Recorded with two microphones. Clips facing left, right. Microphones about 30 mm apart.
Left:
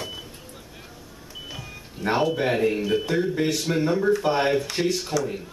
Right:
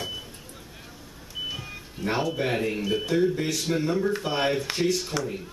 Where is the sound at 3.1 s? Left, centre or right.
Left.